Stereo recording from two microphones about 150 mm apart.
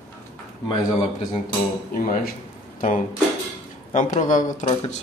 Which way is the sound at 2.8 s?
60° left (ahead or behind).